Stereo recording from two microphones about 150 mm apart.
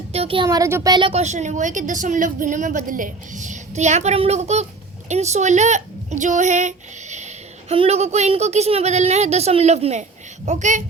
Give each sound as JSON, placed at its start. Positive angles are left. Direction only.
{"t": 0.1, "sound": "a sound", "side_deg": -40}
{"t": 0.4, "sound": "speech", "side_deg": -20}
{"t": 1.1, "sound": "a woman's voice", "side_deg": -50}